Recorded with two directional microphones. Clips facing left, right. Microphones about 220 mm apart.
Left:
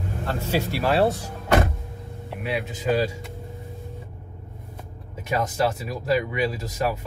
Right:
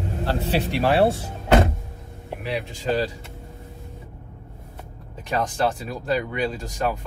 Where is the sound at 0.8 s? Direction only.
25° right (ahead or behind).